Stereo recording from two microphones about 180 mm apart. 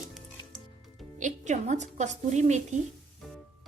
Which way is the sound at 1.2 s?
45° right (ahead or behind).